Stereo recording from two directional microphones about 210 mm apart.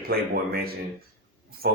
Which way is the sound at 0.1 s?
45° right (ahead or behind).